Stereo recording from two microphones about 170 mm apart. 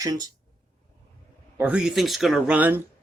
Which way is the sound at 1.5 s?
5° right (ahead or behind).